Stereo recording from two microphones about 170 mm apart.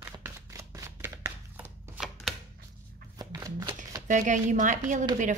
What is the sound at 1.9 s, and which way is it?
Chopping, centre (ahead or behind).